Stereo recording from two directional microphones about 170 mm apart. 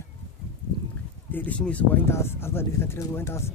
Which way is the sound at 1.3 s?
10° left (ahead or behind).